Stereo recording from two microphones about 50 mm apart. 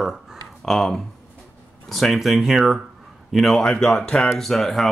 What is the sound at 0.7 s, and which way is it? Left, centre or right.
Speech, centre.